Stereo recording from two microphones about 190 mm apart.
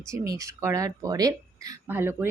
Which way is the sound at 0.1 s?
15° right (ahead or behind).